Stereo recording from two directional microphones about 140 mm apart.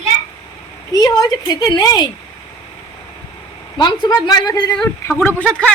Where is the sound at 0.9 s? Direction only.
25° left (ahead or behind).